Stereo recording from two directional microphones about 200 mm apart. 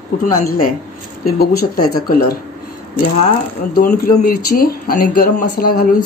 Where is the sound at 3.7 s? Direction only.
50° left (ahead or behind).